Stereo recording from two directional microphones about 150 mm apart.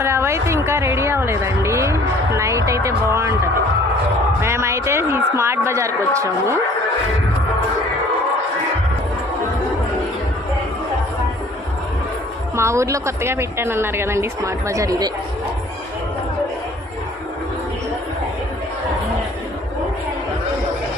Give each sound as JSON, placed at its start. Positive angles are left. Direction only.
{"t": 0.0, "sound": "a woman's voice", "side_deg": -15}
{"t": 4.4, "sound": "a woman's voice", "side_deg": -15}
{"t": 12.5, "sound": "a woman's voice", "side_deg": -20}